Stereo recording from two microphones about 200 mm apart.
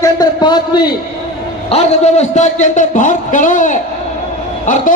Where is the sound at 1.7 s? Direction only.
35° left (ahead or behind).